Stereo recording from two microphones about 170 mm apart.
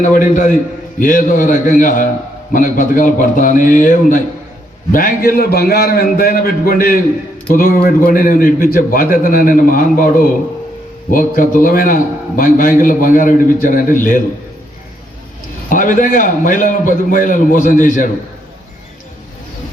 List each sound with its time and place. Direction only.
0.0 s a man's voice: 50° left (ahead or behind)
15.7 s a man's voice: 50° left (ahead or behind)